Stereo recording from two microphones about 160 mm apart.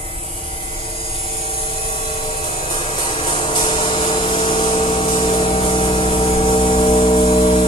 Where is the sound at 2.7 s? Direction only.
35° left (ahead or behind).